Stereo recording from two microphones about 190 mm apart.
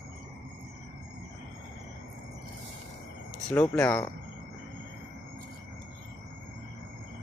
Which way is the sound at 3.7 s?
10° left (ahead or behind).